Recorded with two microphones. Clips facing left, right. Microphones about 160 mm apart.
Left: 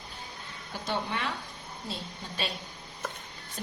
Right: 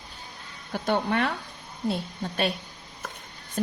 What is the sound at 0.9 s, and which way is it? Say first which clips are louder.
A woman's voice: right 7 dB; 55° right (ahead or behind).